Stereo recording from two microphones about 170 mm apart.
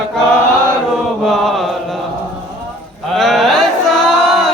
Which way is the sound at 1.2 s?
Centre (ahead or behind).